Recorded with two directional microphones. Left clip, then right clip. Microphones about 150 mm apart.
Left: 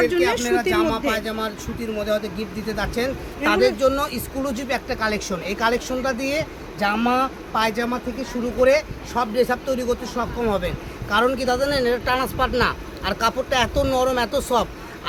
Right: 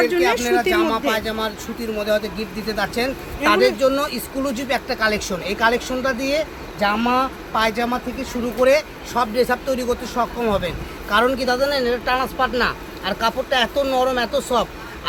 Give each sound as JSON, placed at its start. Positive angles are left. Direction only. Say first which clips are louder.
{"t": 0.0, "sound": "speech", "louder": "right 2 dB", "side_deg": 15}